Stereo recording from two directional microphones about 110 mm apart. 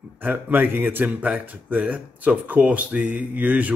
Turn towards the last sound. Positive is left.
turn(degrees=-15)  # may be behind; listen again after turning